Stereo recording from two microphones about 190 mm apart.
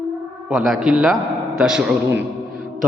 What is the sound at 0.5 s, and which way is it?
A man's voice, centre (ahead or behind).